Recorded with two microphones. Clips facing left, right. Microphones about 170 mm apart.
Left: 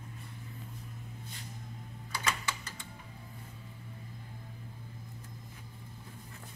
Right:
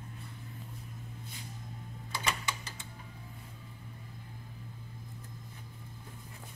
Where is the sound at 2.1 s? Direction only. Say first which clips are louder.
Even; 15° right (ahead or behind).